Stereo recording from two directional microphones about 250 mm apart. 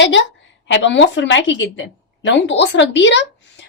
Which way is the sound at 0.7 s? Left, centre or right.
Left.